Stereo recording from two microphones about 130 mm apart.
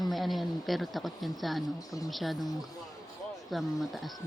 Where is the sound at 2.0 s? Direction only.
Centre (ahead or behind).